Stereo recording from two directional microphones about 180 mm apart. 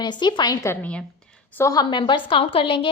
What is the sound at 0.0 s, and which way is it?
A woman's voice, 25° left (ahead or behind).